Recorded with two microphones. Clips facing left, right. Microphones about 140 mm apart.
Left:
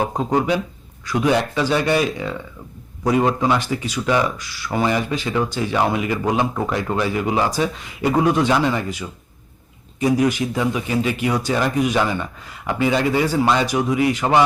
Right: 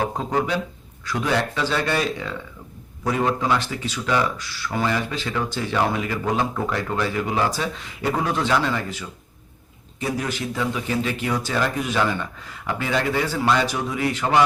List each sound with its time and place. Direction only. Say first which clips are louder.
0.3 s speech: left 4 dB; 15° left (ahead or behind)